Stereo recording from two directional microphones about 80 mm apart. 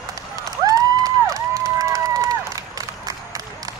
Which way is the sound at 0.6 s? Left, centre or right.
Right.